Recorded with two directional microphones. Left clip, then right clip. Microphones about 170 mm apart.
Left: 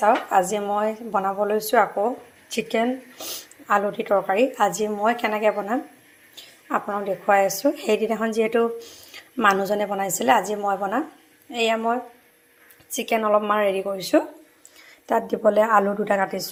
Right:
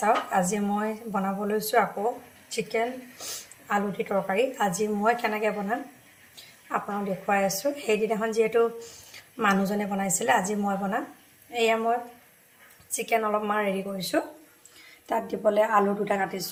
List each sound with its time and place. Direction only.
0.0 s a woman's voice: 35° left (ahead or behind)
7.3 s a woman's voice: 35° left (ahead or behind)